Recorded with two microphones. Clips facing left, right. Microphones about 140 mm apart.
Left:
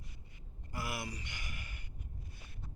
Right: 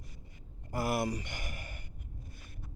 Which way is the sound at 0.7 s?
45° right (ahead or behind).